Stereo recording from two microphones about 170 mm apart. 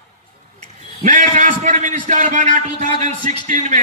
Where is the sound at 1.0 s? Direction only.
50° right (ahead or behind).